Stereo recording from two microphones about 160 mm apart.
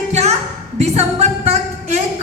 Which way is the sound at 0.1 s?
45° right (ahead or behind).